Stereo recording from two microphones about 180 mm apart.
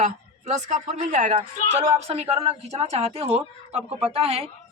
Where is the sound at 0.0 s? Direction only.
40° right (ahead or behind).